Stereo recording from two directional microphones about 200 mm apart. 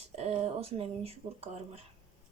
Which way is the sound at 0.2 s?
30° right (ahead or behind).